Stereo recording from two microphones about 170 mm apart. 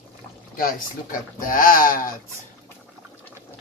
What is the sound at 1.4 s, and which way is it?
Speech, 55° left (ahead or behind).